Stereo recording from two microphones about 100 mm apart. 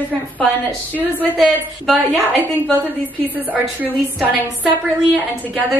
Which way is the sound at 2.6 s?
15° left (ahead or behind).